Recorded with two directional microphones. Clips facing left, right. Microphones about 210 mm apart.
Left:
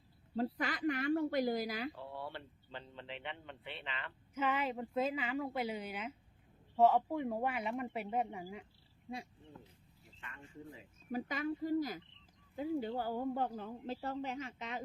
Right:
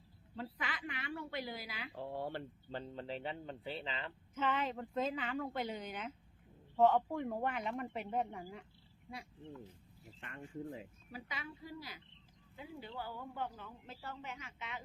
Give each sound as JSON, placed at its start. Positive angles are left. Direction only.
{"t": 0.3, "sound": "a woman's voice", "side_deg": 40}
{"t": 2.0, "sound": "speech", "side_deg": -45}
{"t": 4.4, "sound": "speech", "side_deg": 10}
{"t": 10.2, "sound": "speech", "side_deg": -50}
{"t": 11.1, "sound": "a woman's voice", "side_deg": 45}